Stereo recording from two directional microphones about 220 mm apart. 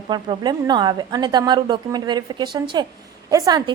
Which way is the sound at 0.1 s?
20° right (ahead or behind).